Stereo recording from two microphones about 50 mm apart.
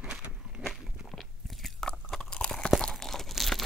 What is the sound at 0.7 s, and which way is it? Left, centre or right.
Crunch, centre.